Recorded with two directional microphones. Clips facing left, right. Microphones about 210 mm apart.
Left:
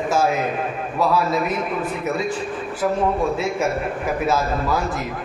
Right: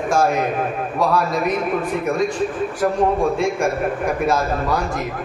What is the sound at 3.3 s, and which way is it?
A man's voice, 5° left (ahead or behind).